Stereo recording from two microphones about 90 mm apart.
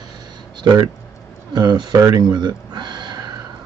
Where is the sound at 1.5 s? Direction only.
55° right (ahead or behind).